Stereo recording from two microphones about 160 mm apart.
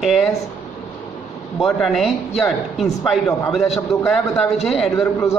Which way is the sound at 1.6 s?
Centre (ahead or behind).